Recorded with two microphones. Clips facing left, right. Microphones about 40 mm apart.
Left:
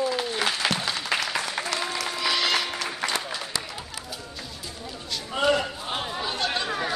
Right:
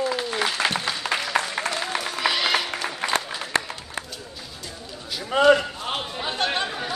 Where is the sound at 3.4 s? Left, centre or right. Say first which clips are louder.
Right 6 dB; right.